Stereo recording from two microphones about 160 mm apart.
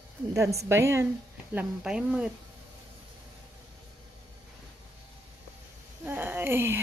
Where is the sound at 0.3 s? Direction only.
20° right (ahead or behind).